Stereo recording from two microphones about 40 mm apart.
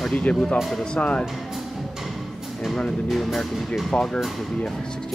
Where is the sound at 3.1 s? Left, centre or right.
Centre.